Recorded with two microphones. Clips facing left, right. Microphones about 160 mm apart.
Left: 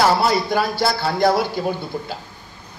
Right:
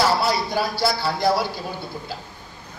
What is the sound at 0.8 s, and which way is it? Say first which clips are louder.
Speech: left 2 dB; 55° left (ahead or behind).